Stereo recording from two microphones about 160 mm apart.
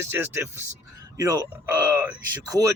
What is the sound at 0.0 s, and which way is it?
Speech, 15° right (ahead or behind).